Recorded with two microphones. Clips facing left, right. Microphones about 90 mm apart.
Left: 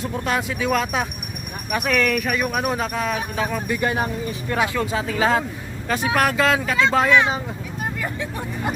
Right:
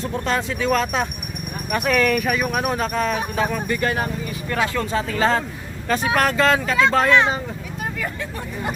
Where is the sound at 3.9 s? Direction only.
20° left (ahead or behind).